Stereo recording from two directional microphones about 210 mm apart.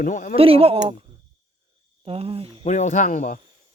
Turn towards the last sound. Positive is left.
turn(degrees=35)  # may be behind; listen again after turning